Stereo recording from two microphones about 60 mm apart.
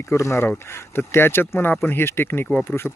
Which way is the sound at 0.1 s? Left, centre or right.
Left.